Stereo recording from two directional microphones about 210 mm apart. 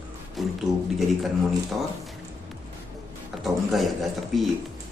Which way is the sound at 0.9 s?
Centre (ahead or behind).